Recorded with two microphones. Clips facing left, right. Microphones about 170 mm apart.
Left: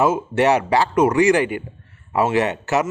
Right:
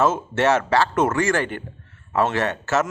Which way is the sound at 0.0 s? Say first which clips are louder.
Left 2 dB; 15° left (ahead or behind).